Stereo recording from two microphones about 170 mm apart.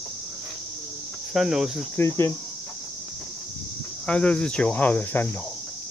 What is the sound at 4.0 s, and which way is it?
Speech, 5° left (ahead or behind).